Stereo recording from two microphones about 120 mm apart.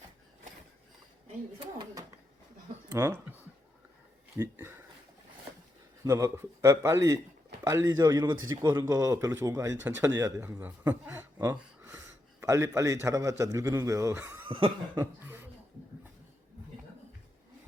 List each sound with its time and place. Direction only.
1.5 s a sound: 40° right (ahead or behind)
2.9 s speech: 25° right (ahead or behind)
4.4 s speech: 15° right (ahead or behind)
6.1 s a man's voice: 25° right (ahead or behind)
11.4 s gasp: 10° right (ahead or behind)
12.5 s a man's voice: 25° right (ahead or behind)
14.4 s chuckle: 45° right (ahead or behind)
15.2 s a sound: 20° right (ahead or behind)